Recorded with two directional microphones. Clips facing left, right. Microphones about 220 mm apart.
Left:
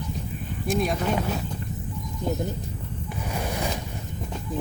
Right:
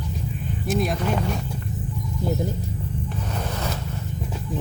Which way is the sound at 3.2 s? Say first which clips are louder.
Left 3 dB; 10° left (ahead or behind).